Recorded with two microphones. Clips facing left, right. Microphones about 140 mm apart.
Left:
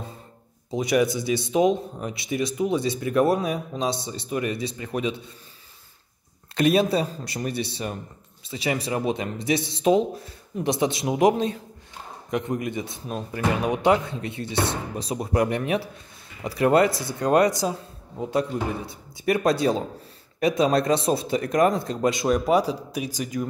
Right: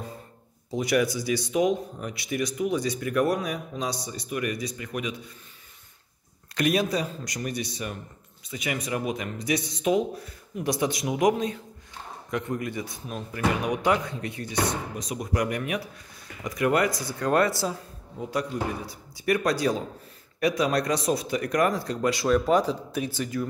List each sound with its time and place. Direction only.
0.7 s speech: 20° left (ahead or behind)
6.5 s speech: 25° left (ahead or behind)